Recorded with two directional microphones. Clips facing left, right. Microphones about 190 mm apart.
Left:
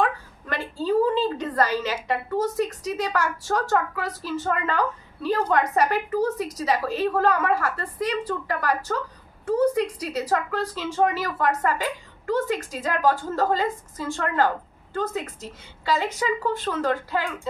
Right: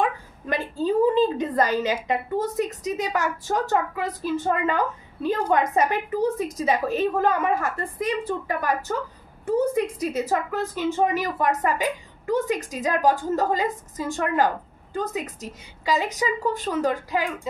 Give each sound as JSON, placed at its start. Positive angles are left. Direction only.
{"t": 0.5, "sound": "a sound", "side_deg": -15}
{"t": 2.0, "sound": "a woman's voice", "side_deg": -20}
{"t": 10.0, "sound": "a woman's voice", "side_deg": -20}